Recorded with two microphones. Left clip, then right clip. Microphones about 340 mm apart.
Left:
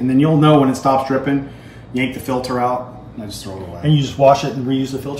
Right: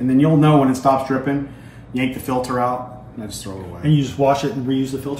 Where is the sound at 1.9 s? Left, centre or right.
Centre.